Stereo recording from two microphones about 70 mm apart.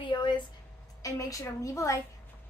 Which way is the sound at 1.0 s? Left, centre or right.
Left.